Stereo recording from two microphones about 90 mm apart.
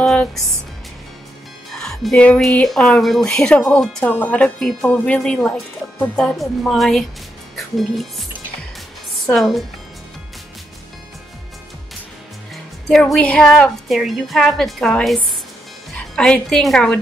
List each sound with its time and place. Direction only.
0.0 s music: 15° left (ahead or behind)
1.7 s music: 5° left (ahead or behind)
2.4 s speech: 5° left (ahead or behind)
4.0 s speech: 15° left (ahead or behind)
7.5 s music: centre (ahead or behind)
9.3 s a woman's voice: centre (ahead or behind)
13.2 s speech: 15° left (ahead or behind)
13.8 s a woman's voice: centre (ahead or behind)